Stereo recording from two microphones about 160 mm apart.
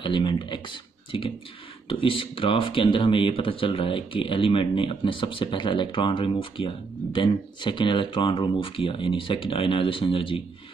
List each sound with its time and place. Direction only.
0.0 s speech: 30° left (ahead or behind)
1.9 s speech: 35° left (ahead or behind)